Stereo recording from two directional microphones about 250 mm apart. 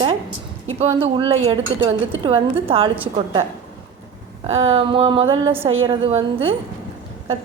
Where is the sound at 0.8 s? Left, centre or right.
Right.